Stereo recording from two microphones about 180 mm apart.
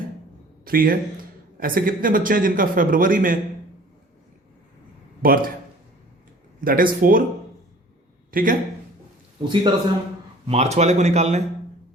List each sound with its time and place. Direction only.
0.6 s a man's voice: 55° right (ahead or behind)
5.2 s a man's voice: 55° right (ahead or behind)
6.6 s a man's voice: 50° right (ahead or behind)
8.3 s a man's voice: 50° right (ahead or behind)
9.4 s a man's voice: 25° right (ahead or behind)